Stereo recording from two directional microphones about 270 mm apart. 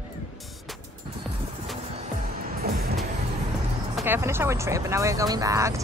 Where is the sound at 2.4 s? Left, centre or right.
Right.